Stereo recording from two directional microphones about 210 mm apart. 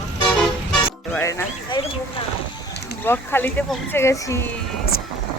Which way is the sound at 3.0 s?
10° left (ahead or behind).